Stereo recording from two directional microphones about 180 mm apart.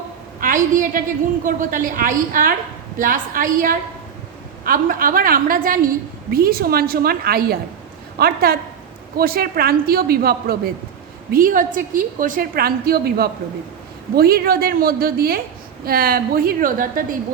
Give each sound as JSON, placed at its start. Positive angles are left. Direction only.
{"t": 0.3, "sound": "a woman's voice", "side_deg": -50}